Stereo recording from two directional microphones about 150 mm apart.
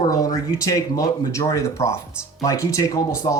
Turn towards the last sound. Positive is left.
turn(degrees=20)  # may be behind; listen again after turning